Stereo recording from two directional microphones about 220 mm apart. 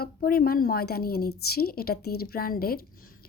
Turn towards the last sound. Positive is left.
turn(degrees=45)  # may be behind; listen again after turning